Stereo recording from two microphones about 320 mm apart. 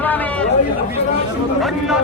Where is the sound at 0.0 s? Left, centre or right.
Centre.